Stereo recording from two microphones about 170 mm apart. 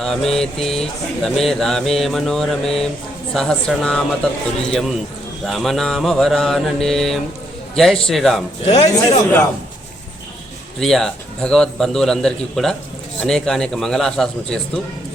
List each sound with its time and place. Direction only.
0.0 s speech: centre (ahead or behind)
8.6 s speech: 40° left (ahead or behind)
10.8 s speech: centre (ahead or behind)